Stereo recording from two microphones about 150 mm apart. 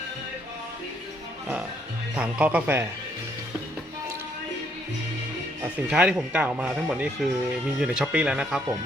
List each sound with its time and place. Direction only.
2.1 s speech: 10° right (ahead or behind)
5.6 s speech: 10° right (ahead or behind)